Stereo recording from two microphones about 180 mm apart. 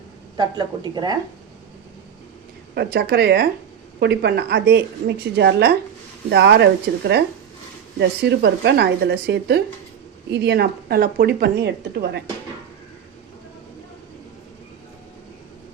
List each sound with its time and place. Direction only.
0.3 s speech: 25° right (ahead or behind)
2.7 s a woman's voice: 65° right (ahead or behind)